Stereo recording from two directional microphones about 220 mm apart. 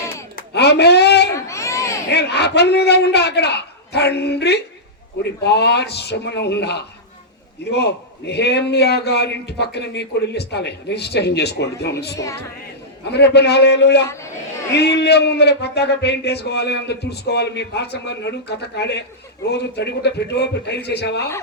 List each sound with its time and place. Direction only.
0.3 s a sound: 50° left (ahead or behind)
1.3 s baby cry: 15° left (ahead or behind)
2.1 s a man's voice: 50° left (ahead or behind)
12.2 s female singing: 15° left (ahead or behind)
13.1 s a man's voice: 50° left (ahead or behind)